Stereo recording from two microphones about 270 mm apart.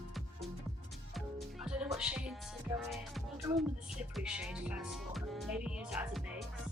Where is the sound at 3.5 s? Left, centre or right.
Centre.